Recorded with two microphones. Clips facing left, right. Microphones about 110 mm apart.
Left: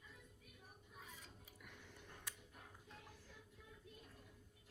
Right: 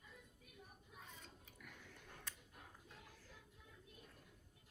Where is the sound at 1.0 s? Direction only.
5° left (ahead or behind).